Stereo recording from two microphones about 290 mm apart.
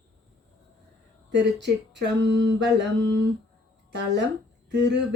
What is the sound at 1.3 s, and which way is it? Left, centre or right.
Speech, right.